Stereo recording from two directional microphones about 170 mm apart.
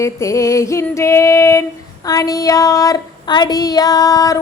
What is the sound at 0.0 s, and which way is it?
Female singing, 15° left (ahead or behind).